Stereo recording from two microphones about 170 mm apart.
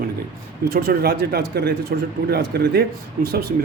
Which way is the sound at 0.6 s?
65° right (ahead or behind).